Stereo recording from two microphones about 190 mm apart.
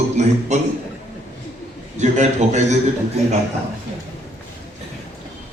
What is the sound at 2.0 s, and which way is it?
Speech, 40° right (ahead or behind).